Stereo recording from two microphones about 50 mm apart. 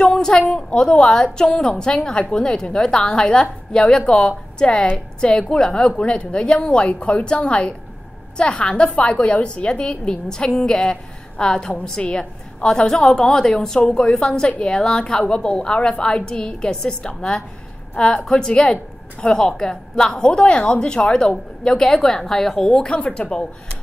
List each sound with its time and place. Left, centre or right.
0.0 s a woman's voice: centre
22.7 s a woman's voice: left